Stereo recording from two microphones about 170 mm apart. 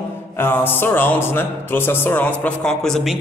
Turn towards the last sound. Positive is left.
turn(degrees=5)  # may be behind; listen again after turning